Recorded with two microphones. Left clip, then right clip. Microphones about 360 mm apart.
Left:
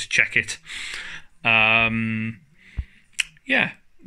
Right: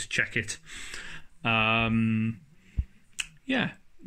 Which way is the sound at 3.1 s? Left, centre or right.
Centre.